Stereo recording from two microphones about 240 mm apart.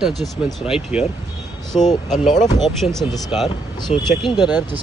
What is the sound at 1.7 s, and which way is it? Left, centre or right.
Speech, left.